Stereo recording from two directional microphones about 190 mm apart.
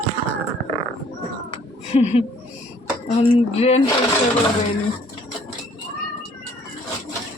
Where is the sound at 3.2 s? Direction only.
35° left (ahead or behind).